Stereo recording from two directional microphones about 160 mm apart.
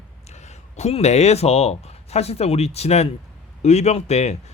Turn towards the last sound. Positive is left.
turn(degrees=40)  # may be behind; listen again after turning